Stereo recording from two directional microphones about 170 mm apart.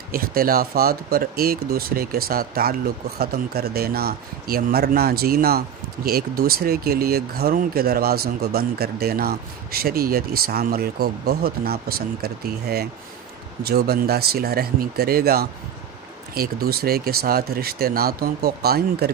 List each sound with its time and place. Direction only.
0.1 s speech: 60° right (ahead or behind)